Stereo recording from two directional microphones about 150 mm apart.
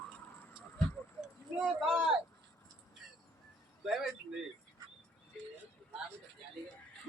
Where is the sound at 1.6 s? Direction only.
5° right (ahead or behind).